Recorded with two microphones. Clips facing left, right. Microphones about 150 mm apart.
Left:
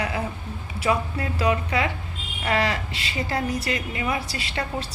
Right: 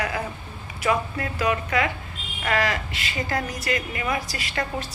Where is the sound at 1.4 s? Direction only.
30° left (ahead or behind).